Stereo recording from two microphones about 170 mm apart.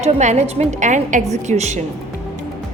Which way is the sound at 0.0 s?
40° right (ahead or behind).